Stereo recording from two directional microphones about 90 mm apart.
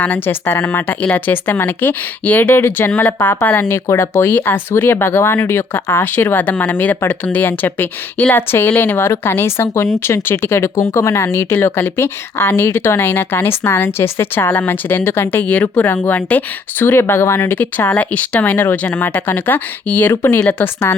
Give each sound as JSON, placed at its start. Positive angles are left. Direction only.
{"t": 0.0, "sound": "speech", "side_deg": 20}
{"t": 17.5, "sound": "speech", "side_deg": 20}